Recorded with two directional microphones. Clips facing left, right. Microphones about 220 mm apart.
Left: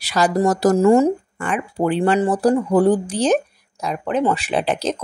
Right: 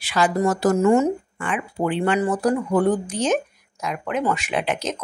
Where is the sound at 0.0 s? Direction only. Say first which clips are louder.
Left 3 dB; 40° left (ahead or behind).